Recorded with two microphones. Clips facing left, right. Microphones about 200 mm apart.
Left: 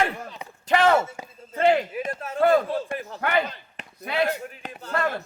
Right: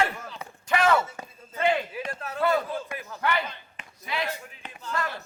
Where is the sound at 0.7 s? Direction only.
30° left (ahead or behind).